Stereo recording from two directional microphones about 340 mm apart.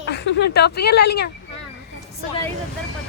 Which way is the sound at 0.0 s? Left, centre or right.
Left.